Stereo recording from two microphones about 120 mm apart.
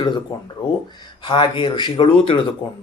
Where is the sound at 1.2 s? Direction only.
45° left (ahead or behind).